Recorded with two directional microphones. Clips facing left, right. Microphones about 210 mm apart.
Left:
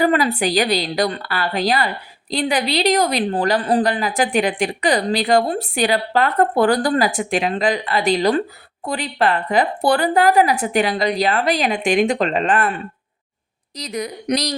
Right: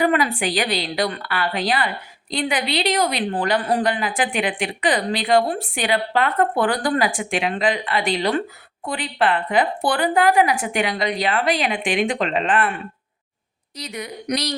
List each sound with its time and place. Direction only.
0.0 s a woman's voice: 35° left (ahead or behind)
13.7 s a woman's voice: 35° left (ahead or behind)